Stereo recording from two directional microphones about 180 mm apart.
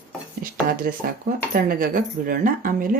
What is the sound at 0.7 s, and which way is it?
Speech, 50° right (ahead or behind).